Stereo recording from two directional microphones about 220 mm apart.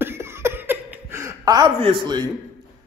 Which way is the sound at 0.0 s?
10° right (ahead or behind).